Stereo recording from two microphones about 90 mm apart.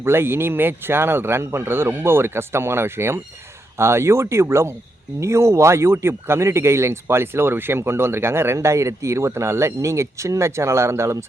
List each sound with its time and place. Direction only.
0.0 s speech: 25° right (ahead or behind)